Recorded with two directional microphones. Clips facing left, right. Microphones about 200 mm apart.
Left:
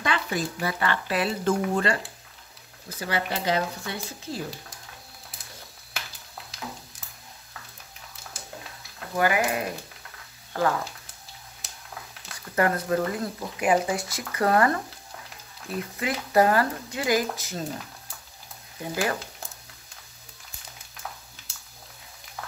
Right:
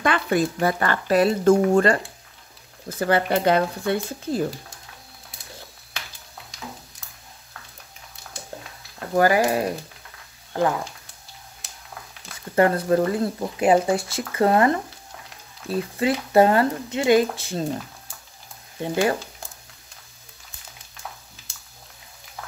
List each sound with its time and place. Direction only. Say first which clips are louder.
0.0 s speech: right 7 dB; 55° right (ahead or behind)
3.0 s speech: right 9 dB; 50° right (ahead or behind)
9.1 s speech: right 6 dB; 35° right (ahead or behind)
10.5 s speech: right 3 dB; 20° right (ahead or behind)
11.6 s a sound: even; centre (ahead or behind)
12.5 s speech: right 5 dB; 30° right (ahead or behind)